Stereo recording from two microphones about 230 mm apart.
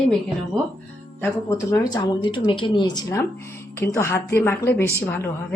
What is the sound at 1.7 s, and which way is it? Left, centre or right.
Speech, centre.